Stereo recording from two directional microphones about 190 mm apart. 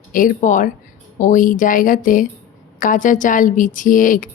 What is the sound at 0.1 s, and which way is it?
Speech, 45° left (ahead or behind).